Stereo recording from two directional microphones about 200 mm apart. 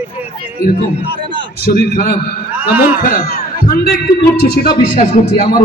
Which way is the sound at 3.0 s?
50° left (ahead or behind).